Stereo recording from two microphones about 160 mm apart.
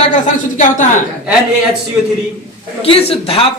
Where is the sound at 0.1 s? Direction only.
50° left (ahead or behind).